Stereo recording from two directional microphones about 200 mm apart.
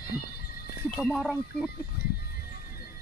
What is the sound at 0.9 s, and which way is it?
Speech, centre (ahead or behind).